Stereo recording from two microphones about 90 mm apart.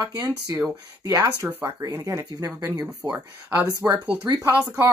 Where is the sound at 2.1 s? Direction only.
40° right (ahead or behind).